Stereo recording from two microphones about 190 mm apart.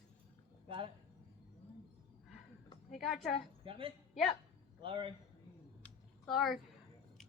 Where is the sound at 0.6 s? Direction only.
30° right (ahead or behind).